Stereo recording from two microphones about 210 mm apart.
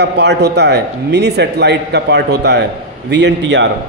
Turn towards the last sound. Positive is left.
turn(degrees=-55)  # may be behind; listen again after turning